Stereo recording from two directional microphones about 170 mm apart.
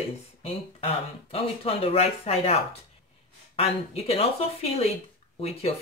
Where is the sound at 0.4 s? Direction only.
35° left (ahead or behind).